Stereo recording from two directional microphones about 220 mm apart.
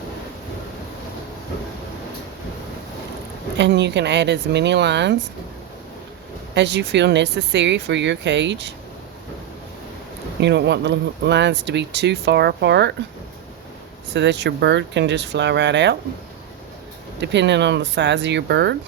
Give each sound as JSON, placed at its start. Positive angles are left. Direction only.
{"t": 3.6, "sound": "speech", "side_deg": -50}
{"t": 6.5, "sound": "speech", "side_deg": -50}
{"t": 10.4, "sound": "speech", "side_deg": -50}
{"t": 14.1, "sound": "speech", "side_deg": -50}
{"t": 17.2, "sound": "speech", "side_deg": -50}